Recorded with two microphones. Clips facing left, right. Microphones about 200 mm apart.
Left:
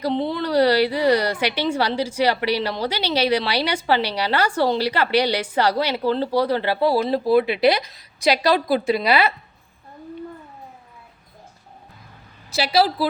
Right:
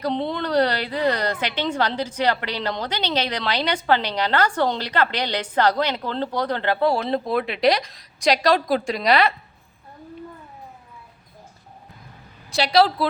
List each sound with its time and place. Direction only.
0.3 s a woman's voice: 5° left (ahead or behind)
12.5 s a woman's voice: 5° left (ahead or behind)